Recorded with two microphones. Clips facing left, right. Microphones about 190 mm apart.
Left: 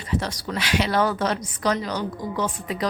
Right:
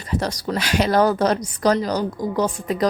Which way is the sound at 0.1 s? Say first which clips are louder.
Right 4 dB; 40° right (ahead or behind).